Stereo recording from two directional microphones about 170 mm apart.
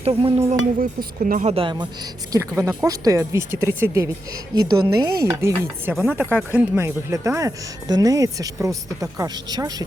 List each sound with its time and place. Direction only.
0.0 s speech: 35° right (ahead or behind)
0.8 s speech: 55° right (ahead or behind)
1.5 s speech: 30° right (ahead or behind)
5.9 s speech: centre (ahead or behind)
6.3 s speech: 10° right (ahead or behind)